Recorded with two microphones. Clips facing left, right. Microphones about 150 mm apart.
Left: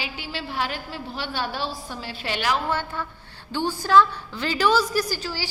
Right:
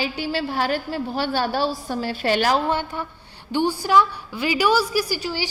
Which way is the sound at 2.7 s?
15° right (ahead or behind).